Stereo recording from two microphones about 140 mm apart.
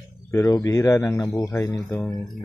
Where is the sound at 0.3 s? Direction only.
20° left (ahead or behind).